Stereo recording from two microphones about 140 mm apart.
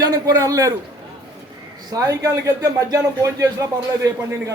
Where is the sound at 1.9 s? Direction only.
25° right (ahead or behind).